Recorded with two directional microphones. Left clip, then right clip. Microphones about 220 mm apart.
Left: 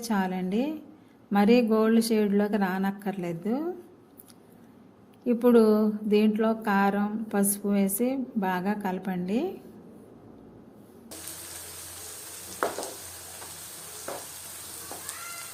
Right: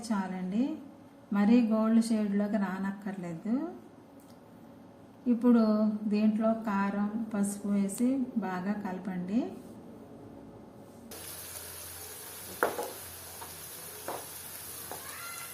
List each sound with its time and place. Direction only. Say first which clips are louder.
0.1 s speech: left 7 dB; 50° left (ahead or behind)
5.2 s speech: left 7 dB; 50° left (ahead or behind)